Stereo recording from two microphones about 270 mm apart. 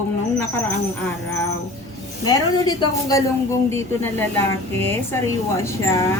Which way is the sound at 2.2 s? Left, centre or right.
Centre.